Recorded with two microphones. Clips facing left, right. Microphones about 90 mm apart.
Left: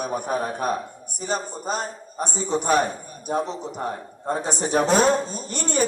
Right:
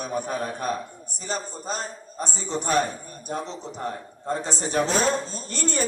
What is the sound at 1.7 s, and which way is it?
Speech, 50° left (ahead or behind).